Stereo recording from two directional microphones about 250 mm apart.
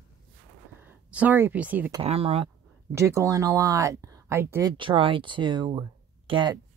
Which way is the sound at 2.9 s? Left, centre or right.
Centre.